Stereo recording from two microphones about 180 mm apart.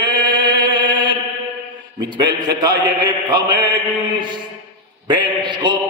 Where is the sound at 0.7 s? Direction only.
25° right (ahead or behind).